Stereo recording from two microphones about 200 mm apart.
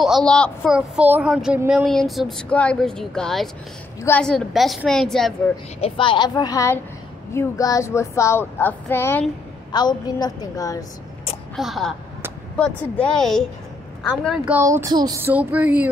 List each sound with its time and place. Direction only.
0.0 s speech: centre (ahead or behind)
5.8 s a woman's voice: 25° left (ahead or behind)
7.3 s child singing: 15° left (ahead or behind)
9.7 s a woman's voice: 20° left (ahead or behind)
11.5 s speech: centre (ahead or behind)